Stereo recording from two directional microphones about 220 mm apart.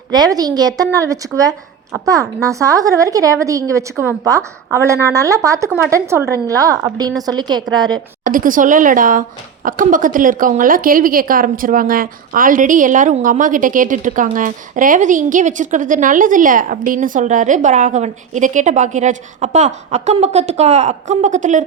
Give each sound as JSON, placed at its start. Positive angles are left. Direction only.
{"t": 0.1, "sound": "a woman's voice", "side_deg": -15}
{"t": 8.2, "sound": "a woman's voice", "side_deg": -40}